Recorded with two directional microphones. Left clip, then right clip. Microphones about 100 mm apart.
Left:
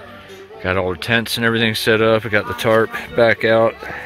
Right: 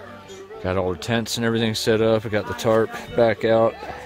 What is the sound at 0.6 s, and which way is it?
Speech, 15° right (ahead or behind).